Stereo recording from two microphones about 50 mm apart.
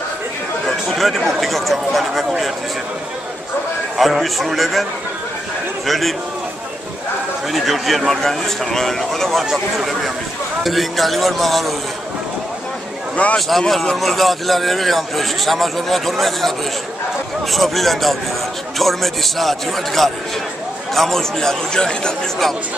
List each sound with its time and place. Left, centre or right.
0.7 s speech: centre
3.9 s a man's voice: centre
5.9 s a man's voice: centre
7.5 s a man's voice: centre
13.1 s speech: left
13.5 s a man's voice: centre